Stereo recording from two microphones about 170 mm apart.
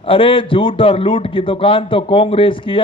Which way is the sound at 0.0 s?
30° left (ahead or behind).